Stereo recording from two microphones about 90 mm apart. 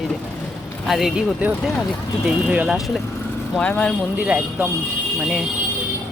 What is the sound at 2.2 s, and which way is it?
Speech, 10° right (ahead or behind).